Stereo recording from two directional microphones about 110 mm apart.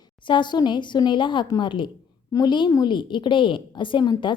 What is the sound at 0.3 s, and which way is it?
A woman's voice, 45° left (ahead or behind).